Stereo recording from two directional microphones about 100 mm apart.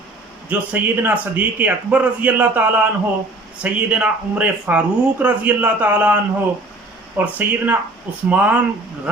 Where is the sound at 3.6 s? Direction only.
10° right (ahead or behind).